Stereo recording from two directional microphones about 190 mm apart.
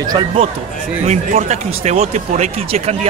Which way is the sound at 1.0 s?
35° right (ahead or behind).